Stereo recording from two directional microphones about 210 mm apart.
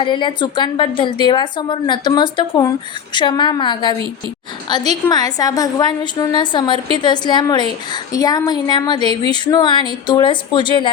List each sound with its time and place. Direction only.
0.0 s a woman's voice: 20° left (ahead or behind)